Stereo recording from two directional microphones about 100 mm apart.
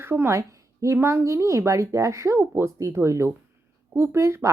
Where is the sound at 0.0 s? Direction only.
25° right (ahead or behind).